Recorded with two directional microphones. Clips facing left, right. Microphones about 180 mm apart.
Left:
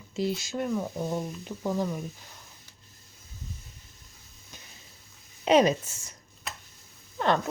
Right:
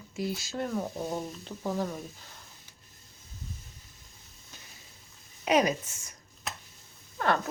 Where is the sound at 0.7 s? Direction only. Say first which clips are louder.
Left 2 dB; 10° right (ahead or behind).